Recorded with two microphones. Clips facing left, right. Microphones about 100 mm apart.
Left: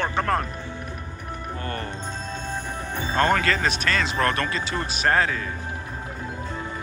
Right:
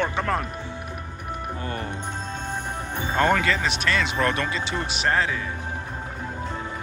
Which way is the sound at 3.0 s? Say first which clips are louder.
Even; 10° right (ahead or behind).